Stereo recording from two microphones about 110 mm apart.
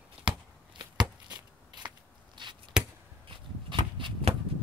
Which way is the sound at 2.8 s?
10° right (ahead or behind).